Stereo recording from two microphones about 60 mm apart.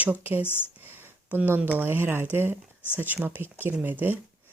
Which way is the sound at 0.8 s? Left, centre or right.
Right.